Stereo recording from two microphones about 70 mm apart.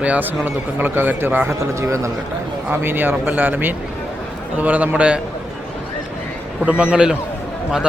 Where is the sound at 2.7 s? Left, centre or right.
Right.